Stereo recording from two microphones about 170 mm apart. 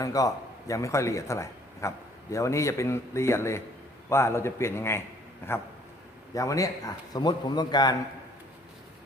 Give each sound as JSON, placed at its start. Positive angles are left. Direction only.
{"t": 0.0, "sound": "a man's voice", "side_deg": 20}